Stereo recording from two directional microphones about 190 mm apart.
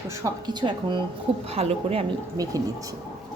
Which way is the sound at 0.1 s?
15° right (ahead or behind).